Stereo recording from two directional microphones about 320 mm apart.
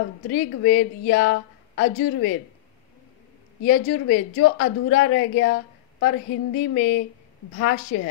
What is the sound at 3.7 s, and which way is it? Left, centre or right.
Speech, left.